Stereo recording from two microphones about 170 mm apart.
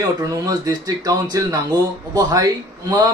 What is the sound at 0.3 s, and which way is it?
A man's voice, 20° right (ahead or behind).